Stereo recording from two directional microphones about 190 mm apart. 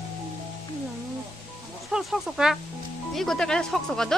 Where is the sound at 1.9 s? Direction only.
Centre (ahead or behind).